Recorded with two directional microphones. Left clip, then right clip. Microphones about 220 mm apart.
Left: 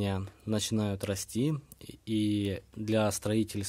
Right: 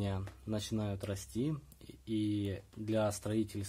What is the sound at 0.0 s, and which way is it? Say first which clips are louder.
Speech: left 6 dB; 45° left (ahead or behind).